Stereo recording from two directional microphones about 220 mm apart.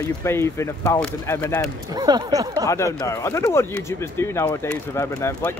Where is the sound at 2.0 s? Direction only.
15° right (ahead or behind).